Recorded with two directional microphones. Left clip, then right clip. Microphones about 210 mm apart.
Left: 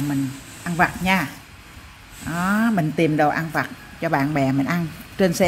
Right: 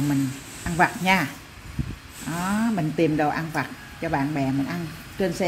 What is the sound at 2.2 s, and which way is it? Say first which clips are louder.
Speech: left 5 dB; 15° left (ahead or behind).